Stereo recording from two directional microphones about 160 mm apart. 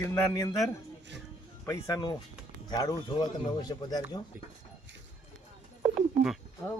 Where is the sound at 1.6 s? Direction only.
20° left (ahead or behind).